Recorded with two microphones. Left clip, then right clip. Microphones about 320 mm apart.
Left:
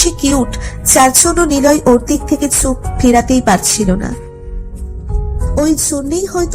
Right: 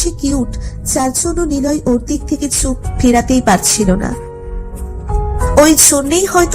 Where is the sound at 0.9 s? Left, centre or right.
Left; by 4.2 s centre.